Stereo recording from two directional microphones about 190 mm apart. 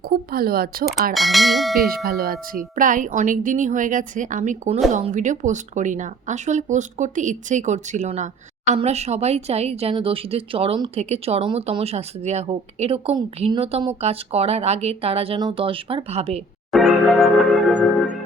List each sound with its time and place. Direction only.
0.1 s speech: 50° right (ahead or behind)
1.1 s bell: centre (ahead or behind)
2.0 s speech: 50° right (ahead or behind); by 16.4 s 30° right (ahead or behind)
16.7 s church bell: centre (ahead or behind)